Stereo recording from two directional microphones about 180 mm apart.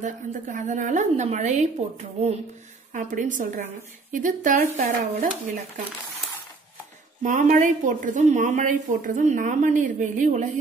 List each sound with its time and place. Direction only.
0.0 s a woman's voice: 45° right (ahead or behind)
7.2 s a woman's voice: 45° right (ahead or behind)